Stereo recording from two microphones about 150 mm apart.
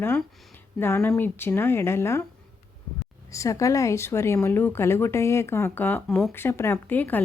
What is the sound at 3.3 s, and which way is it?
Speech, 20° left (ahead or behind).